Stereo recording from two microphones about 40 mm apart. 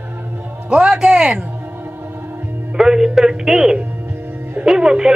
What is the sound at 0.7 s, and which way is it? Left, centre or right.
Speech, right.